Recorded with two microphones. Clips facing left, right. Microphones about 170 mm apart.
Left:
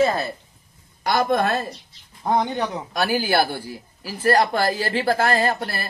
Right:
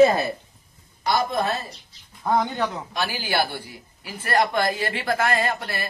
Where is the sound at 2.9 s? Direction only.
45° left (ahead or behind).